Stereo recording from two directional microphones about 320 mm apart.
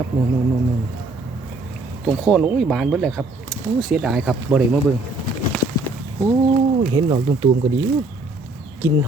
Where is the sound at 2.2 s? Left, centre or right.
Centre.